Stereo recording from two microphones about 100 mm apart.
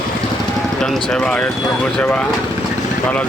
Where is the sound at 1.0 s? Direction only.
5° left (ahead or behind).